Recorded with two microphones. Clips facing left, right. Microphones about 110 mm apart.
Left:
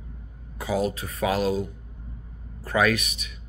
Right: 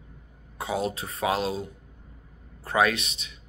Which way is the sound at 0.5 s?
30° right (ahead or behind).